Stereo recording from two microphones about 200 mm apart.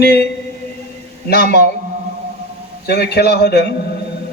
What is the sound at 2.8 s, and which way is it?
Speech, 55° left (ahead or behind).